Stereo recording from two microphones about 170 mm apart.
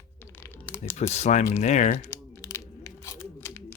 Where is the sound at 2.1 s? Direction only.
15° left (ahead or behind).